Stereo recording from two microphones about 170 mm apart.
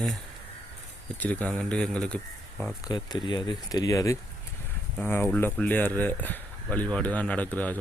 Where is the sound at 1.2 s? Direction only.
10° left (ahead or behind).